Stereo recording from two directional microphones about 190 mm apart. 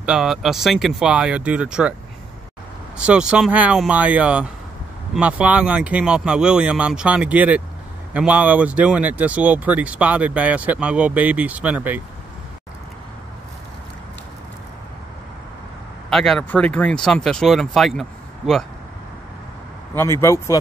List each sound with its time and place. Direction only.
0.0 s speech: 5° right (ahead or behind)
3.0 s speech: 5° right (ahead or behind)
16.1 s speech: centre (ahead or behind)
20.2 s speech: 15° left (ahead or behind)